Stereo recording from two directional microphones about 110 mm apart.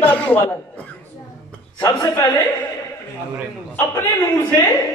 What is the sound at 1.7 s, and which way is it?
Speech, 25° left (ahead or behind).